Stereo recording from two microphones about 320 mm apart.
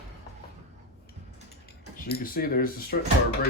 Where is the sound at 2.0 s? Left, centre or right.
Left.